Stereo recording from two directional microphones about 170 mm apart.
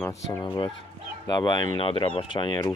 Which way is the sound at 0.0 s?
20° left (ahead or behind).